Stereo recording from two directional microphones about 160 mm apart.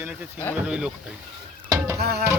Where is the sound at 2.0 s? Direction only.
85° right.